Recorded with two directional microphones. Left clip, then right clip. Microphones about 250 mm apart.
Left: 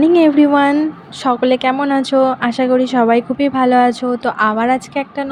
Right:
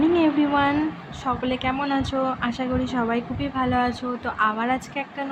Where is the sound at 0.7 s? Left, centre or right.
Centre.